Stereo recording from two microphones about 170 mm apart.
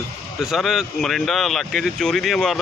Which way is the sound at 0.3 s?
Centre (ahead or behind).